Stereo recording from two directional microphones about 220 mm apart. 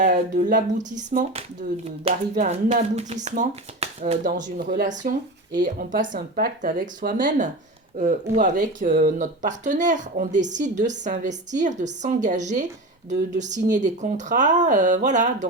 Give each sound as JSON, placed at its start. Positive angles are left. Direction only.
{"t": 0.0, "sound": "speech", "side_deg": -40}